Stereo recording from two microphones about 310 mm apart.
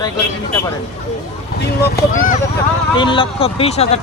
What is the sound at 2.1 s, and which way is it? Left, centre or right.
Speech, left.